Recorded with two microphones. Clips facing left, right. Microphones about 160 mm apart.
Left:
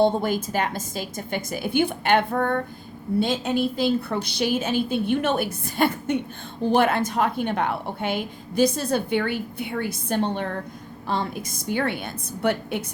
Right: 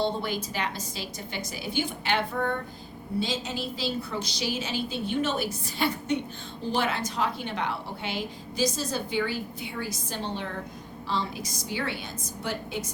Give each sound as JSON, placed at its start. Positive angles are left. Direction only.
{"t": 0.0, "sound": "a woman's voice", "side_deg": 50}